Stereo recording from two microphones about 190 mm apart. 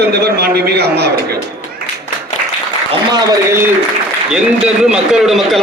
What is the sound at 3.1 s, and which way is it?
Speech, 15° right (ahead or behind).